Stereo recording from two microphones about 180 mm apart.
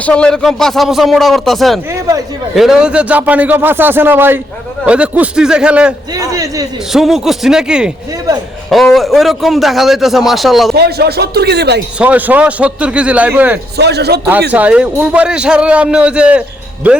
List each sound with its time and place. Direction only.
0.0 s a man's voice: 5° left (ahead or behind)
1.9 s a man's voice: 20° right (ahead or behind)
2.6 s a man's voice: 5° right (ahead or behind)
6.1 s a man's voice: 20° right (ahead or behind)
6.9 s a man's voice: centre (ahead or behind)
10.8 s speech: 60° right (ahead or behind)
11.9 s a man's voice: 10° right (ahead or behind)
13.7 s a man's voice: 65° right (ahead or behind)
14.5 s a man's voice: 5° right (ahead or behind)